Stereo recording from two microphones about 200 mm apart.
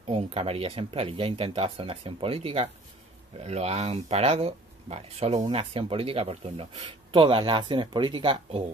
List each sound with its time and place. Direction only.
0.1 s speech: 30° right (ahead or behind)